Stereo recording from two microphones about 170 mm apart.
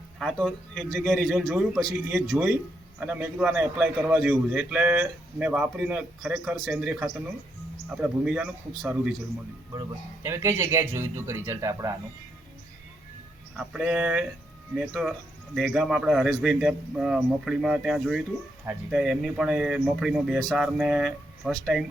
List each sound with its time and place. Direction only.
0.2 s a man's voice: centre (ahead or behind)
10.2 s a man's voice: 15° right (ahead or behind)
13.6 s speech: 5° right (ahead or behind)